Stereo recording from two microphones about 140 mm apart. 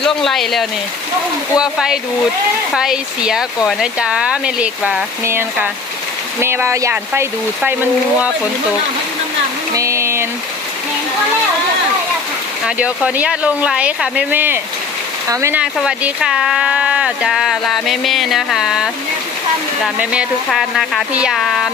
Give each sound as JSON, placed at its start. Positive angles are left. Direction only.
{"t": 0.0, "sound": "speech", "side_deg": 0}
{"t": 5.2, "sound": "speech", "side_deg": -20}
{"t": 9.7, "sound": "a sound", "side_deg": -20}
{"t": 12.6, "sound": "speech", "side_deg": -5}
{"t": 15.6, "sound": "speech", "side_deg": -5}
{"t": 20.5, "sound": "speech", "side_deg": 0}